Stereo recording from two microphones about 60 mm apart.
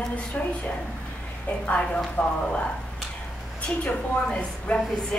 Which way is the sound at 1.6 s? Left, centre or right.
Left.